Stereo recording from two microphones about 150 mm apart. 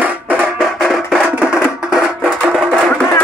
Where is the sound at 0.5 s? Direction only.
Centre (ahead or behind).